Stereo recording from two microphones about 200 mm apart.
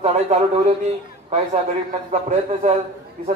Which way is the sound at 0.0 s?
35° right (ahead or behind).